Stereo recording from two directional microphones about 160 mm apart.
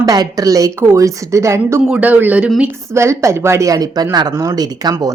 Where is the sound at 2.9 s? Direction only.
15° right (ahead or behind).